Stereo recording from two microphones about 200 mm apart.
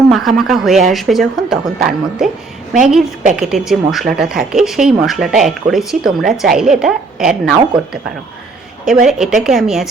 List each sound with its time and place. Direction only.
0.1 s speech: centre (ahead or behind)
8.8 s speech: centre (ahead or behind)